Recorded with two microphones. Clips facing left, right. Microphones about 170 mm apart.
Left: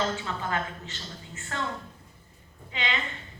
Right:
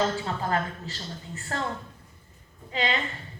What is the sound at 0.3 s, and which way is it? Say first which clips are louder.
Speech: right 3 dB; 35° right (ahead or behind).